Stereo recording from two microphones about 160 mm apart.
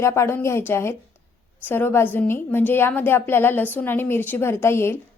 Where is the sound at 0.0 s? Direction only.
15° left (ahead or behind).